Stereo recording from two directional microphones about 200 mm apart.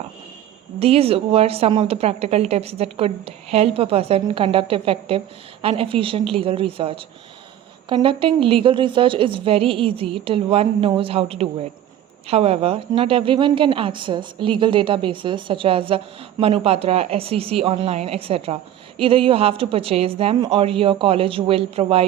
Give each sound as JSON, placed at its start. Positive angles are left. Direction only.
{"t": 0.8, "sound": "a woman's voice", "side_deg": -30}